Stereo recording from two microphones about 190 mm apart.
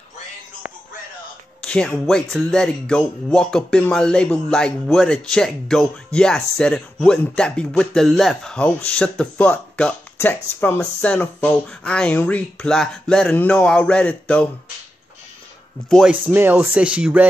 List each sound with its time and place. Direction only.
1.6 s speech: 5° left (ahead or behind)
15.9 s speech: 5° right (ahead or behind)